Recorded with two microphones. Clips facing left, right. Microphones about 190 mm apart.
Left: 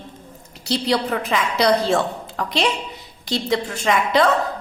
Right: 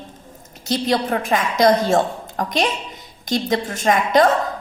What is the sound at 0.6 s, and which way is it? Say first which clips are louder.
A woman's voice: right 1 dB; 50° right (ahead or behind).